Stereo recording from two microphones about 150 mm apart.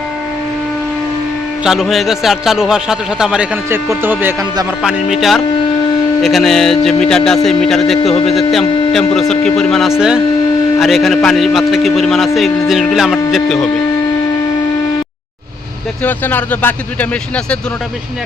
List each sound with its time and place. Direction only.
1.6 s a man's voice: 5° right (ahead or behind)
6.2 s a man's voice: centre (ahead or behind)
8.1 s speech: 40° left (ahead or behind)
8.5 s a man's voice: centre (ahead or behind)
16.0 s speech: 10° left (ahead or behind)